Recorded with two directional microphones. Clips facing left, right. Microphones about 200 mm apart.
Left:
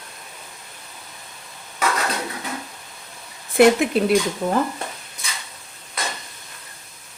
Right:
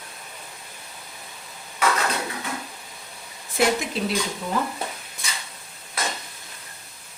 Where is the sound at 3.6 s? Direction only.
60° left (ahead or behind).